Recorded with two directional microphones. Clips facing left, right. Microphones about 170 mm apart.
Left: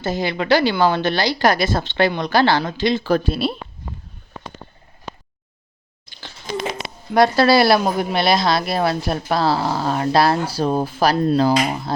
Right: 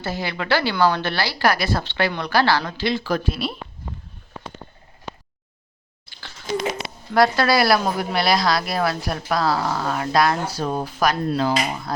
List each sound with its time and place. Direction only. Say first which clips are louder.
0.0 s a woman's voice: left 5 dB; 20° left (ahead or behind)
7.1 s a woman's voice: left 3 dB; 25° left (ahead or behind)